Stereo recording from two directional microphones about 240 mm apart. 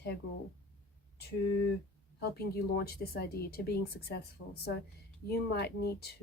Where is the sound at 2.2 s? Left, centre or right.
Left.